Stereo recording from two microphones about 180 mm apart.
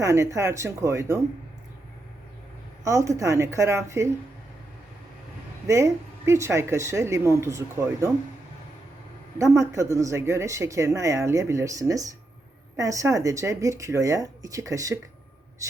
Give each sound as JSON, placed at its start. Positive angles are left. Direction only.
{"t": 0.0, "sound": "speech", "side_deg": -15}
{"t": 2.8, "sound": "speech", "side_deg": -15}
{"t": 5.6, "sound": "speech", "side_deg": -15}
{"t": 9.4, "sound": "speech", "side_deg": -15}